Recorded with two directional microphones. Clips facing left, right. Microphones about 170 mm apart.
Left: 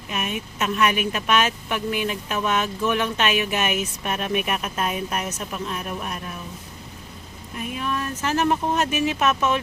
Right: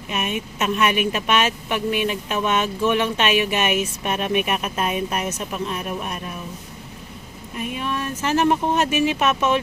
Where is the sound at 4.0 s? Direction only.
20° right (ahead or behind).